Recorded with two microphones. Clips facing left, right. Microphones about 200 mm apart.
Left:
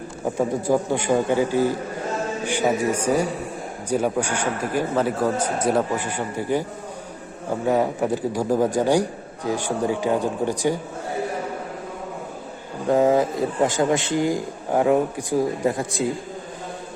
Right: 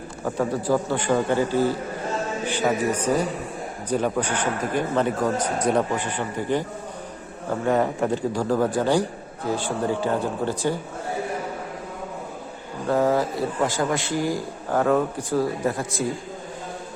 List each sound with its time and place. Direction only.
0.3 s a man's voice: 15° left (ahead or behind)
12.9 s a man's voice: 20° left (ahead or behind)